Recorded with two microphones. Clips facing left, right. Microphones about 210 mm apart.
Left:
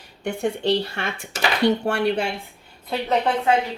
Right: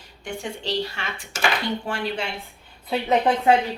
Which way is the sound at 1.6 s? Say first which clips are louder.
Left 8 dB; 70° left (ahead or behind).